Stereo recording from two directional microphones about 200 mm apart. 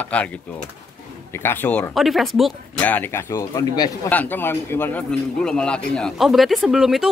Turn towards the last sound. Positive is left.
turn(degrees=0)  # may be behind; listen again after turning